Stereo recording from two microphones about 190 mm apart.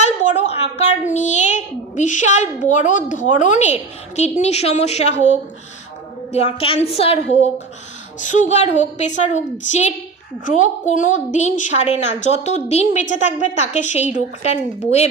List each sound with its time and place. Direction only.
0.0 s a sound: 40° left (ahead or behind)
1.1 s a child's voice: 40° left (ahead or behind)
6.3 s a child's voice: 30° left (ahead or behind)